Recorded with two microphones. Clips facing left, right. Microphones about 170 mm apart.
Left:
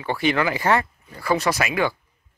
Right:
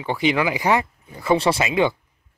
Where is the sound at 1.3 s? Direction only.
30° right (ahead or behind).